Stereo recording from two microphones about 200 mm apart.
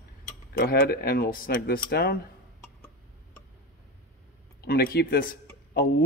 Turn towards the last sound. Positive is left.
turn(degrees=45)  # may be behind; listen again after turning